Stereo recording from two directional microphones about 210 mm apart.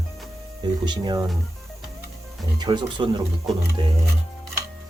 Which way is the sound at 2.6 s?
20° right (ahead or behind).